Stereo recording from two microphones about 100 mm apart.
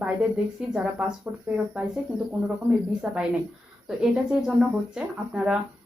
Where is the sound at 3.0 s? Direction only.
10° right (ahead or behind).